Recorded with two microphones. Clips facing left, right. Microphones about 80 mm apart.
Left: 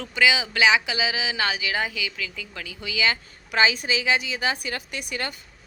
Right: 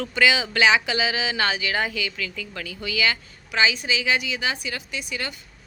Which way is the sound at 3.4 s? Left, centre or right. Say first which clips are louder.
Left 1 dB; left.